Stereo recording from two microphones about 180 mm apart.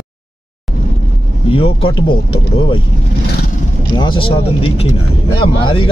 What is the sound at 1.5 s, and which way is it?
Speech, 30° left (ahead or behind).